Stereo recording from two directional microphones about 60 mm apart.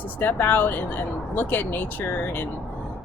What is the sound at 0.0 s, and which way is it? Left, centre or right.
Speech, left.